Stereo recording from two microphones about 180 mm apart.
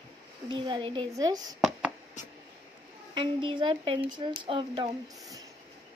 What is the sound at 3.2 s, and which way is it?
Speech, 30° right (ahead or behind).